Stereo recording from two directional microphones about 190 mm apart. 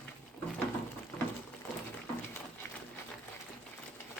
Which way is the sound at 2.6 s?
10° left (ahead or behind).